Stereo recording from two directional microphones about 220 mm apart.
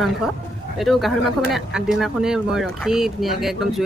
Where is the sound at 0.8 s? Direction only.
Centre (ahead or behind).